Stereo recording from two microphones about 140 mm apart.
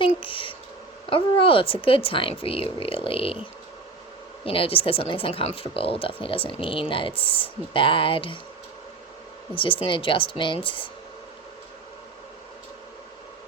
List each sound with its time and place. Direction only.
0.0 s a sound: 40° left (ahead or behind)
1.1 s speech: 40° left (ahead or behind)
4.4 s speech: 40° left (ahead or behind)
9.6 s speech: 40° left (ahead or behind)